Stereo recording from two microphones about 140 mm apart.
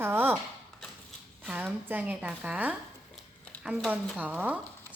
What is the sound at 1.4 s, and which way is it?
Speech, 10° right (ahead or behind).